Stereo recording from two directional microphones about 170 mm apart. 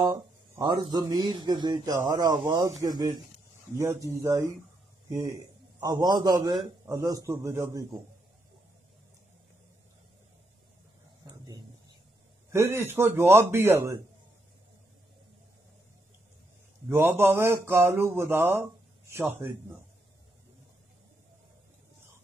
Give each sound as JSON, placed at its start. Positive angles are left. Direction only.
{"t": 0.6, "sound": "a man's voice", "side_deg": -25}
{"t": 11.2, "sound": "a sound", "side_deg": -25}
{"t": 12.4, "sound": "speech", "side_deg": -15}
{"t": 16.9, "sound": "speech", "side_deg": -15}